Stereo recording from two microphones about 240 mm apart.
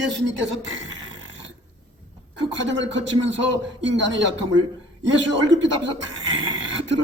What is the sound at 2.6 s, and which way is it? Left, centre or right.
A man's voice, right.